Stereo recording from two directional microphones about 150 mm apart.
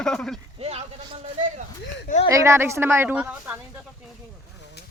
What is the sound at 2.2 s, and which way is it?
A woman's voice, 20° right (ahead or behind).